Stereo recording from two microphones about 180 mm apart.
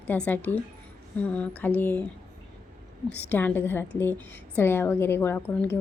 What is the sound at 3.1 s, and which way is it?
A woman's voice, 10° left (ahead or behind).